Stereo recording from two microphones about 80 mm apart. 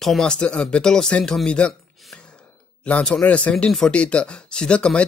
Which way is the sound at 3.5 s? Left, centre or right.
Centre.